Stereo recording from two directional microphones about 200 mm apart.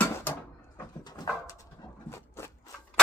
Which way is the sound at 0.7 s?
20° left (ahead or behind).